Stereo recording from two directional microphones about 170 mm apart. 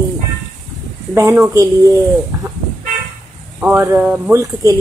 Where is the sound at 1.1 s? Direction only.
20° right (ahead or behind).